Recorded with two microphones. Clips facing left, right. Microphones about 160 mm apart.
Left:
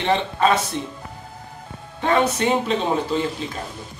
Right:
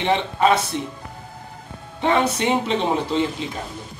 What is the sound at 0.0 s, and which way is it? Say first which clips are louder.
Speech: even; 15° right (ahead or behind).